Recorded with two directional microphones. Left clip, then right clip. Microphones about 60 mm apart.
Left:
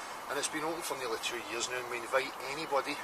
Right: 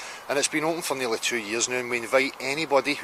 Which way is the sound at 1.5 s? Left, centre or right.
Right.